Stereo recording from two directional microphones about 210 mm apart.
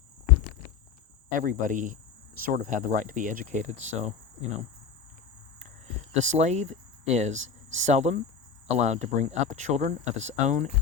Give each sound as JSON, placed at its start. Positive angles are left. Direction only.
{"t": 1.3, "sound": "speech", "side_deg": -40}
{"t": 6.1, "sound": "speech", "side_deg": -35}